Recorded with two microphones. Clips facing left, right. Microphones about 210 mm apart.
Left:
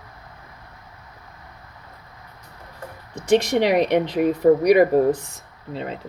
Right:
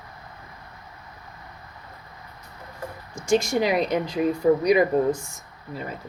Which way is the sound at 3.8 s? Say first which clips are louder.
Left 4 dB; 70° left (ahead or behind).